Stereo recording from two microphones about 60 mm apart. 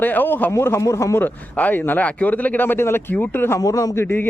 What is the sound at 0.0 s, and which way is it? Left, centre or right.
Speech, left.